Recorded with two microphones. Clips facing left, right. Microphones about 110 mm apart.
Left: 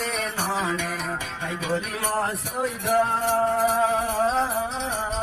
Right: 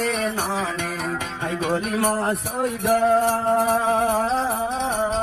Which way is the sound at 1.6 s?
55° right (ahead or behind).